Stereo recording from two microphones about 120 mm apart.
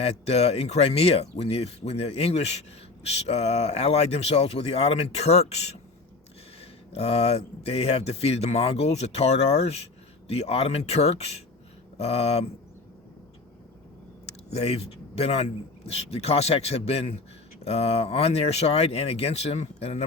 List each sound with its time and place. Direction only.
0.0 s speech: 60° left (ahead or behind)
14.3 s speech: 60° left (ahead or behind)